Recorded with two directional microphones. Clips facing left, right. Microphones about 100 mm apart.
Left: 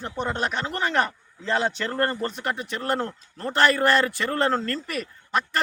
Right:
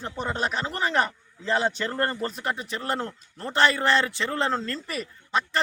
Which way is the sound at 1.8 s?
15° right (ahead or behind).